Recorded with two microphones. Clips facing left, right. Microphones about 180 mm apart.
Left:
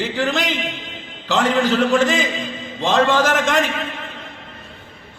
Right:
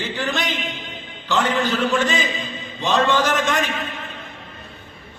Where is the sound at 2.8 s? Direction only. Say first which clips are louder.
Left 2 dB; 90° left.